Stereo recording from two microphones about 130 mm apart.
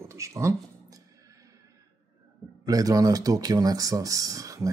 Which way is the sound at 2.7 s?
30° right (ahead or behind).